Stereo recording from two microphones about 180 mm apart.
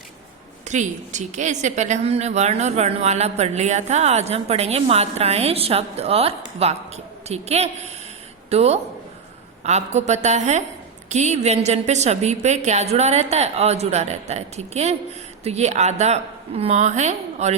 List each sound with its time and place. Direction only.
0.6 s a woman's voice: 40° right (ahead or behind)